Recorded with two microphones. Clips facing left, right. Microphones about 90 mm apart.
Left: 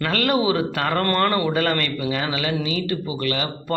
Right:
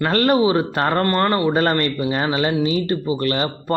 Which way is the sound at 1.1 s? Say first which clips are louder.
Right 2 dB; 20° right (ahead or behind).